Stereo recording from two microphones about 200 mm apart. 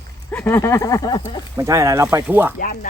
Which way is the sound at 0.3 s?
10° left (ahead or behind).